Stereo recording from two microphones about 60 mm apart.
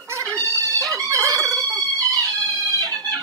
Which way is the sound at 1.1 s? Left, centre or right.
Right.